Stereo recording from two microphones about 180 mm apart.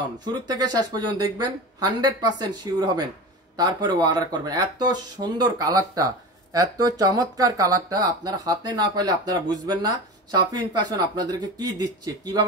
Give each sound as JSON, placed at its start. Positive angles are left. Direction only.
{"t": 0.2, "sound": "speech", "side_deg": -20}